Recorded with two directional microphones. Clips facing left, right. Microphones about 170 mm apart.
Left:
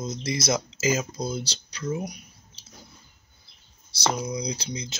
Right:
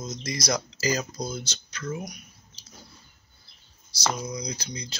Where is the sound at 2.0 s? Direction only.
30° left (ahead or behind).